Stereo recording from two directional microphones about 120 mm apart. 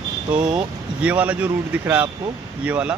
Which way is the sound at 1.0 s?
15° right (ahead or behind).